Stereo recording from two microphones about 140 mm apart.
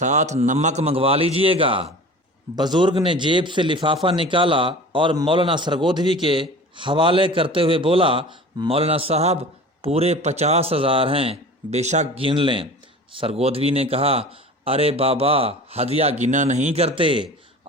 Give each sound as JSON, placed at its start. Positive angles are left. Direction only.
{"t": 0.0, "sound": "a man's voice", "side_deg": -55}
{"t": 12.2, "sound": "a man's voice", "side_deg": -40}